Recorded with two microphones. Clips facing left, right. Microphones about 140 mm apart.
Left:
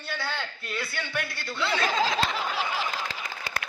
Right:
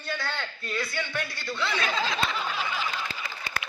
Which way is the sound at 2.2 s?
90° left.